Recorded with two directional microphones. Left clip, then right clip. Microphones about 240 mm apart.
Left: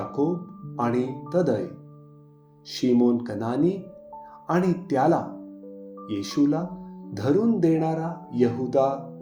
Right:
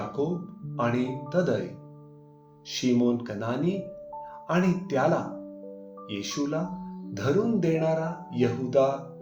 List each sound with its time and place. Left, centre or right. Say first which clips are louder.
0.2 s speech: left 5 dB; left
2.6 s speech: left 3 dB; left